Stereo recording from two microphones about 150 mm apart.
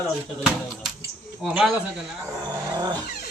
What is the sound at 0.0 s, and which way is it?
A man's voice, 5° right (ahead or behind).